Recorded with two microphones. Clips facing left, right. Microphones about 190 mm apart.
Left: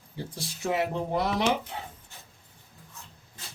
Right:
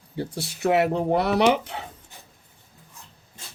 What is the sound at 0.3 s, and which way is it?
Speech, 70° right (ahead or behind).